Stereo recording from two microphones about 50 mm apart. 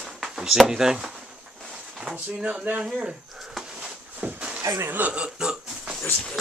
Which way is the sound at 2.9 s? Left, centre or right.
Centre.